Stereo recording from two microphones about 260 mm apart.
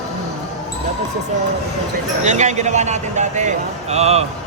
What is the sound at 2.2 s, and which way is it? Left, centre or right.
Speech, right.